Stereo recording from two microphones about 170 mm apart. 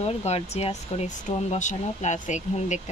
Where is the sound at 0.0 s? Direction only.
40° left (ahead or behind).